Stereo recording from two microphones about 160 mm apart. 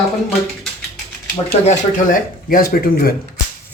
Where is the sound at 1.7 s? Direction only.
55° left (ahead or behind).